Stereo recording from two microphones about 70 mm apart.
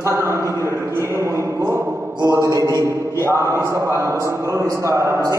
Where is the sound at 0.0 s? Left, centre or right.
Right.